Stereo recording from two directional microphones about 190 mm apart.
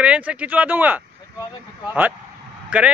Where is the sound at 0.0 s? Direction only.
5° right (ahead or behind).